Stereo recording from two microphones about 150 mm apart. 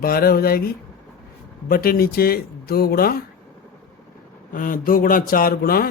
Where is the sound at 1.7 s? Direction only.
80° left.